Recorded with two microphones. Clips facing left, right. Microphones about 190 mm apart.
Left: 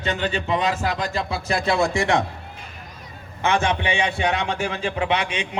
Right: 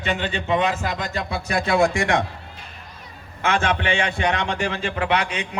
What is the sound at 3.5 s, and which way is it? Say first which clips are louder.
Speech: even; 15° left (ahead or behind).